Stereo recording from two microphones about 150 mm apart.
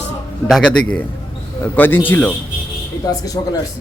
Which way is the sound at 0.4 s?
5° left (ahead or behind).